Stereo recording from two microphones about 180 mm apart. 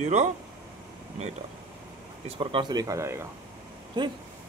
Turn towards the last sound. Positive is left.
turn(degrees=-25)  # may be behind; listen again after turning